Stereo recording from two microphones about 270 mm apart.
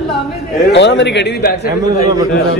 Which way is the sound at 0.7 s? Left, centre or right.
Left.